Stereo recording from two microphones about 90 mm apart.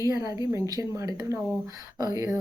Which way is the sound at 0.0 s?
40° right (ahead or behind).